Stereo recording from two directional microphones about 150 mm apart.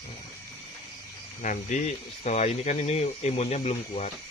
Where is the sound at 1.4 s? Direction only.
55° left (ahead or behind).